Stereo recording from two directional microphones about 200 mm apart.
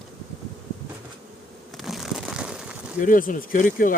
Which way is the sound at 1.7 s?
Centre (ahead or behind).